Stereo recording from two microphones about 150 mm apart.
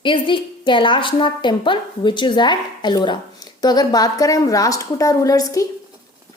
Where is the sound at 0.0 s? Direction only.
35° left (ahead or behind).